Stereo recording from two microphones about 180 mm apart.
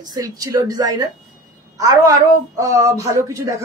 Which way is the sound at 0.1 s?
20° right (ahead or behind).